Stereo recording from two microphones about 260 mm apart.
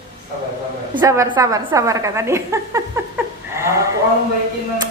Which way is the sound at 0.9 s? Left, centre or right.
Centre.